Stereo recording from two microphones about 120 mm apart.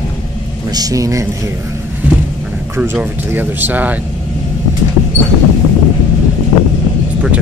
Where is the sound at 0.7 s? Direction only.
25° right (ahead or behind).